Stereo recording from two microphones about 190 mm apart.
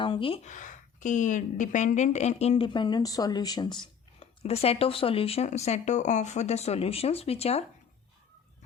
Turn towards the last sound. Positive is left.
turn(degrees=30)  # may be behind; listen again after turning